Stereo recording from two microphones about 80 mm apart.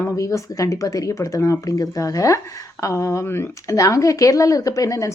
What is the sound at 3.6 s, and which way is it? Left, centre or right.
Speech, left.